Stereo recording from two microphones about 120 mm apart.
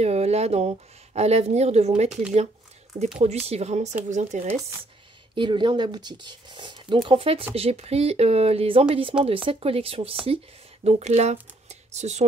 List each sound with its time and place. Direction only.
0.0 s speech: 60° right (ahead or behind)
3.2 s speech: 60° right (ahead or behind)
4.1 s speech: 80° right
5.3 s speech: 45° right (ahead or behind); by 12.3 s 70° right (ahead or behind)